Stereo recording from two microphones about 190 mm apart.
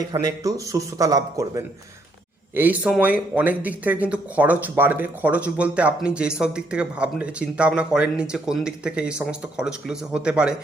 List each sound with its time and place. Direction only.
0.1 s speech: 20° right (ahead or behind)